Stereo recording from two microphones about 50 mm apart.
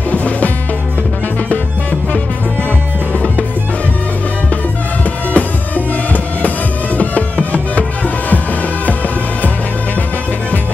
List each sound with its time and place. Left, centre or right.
0.1 s music: left
1.5 s music: left
5.3 s music: left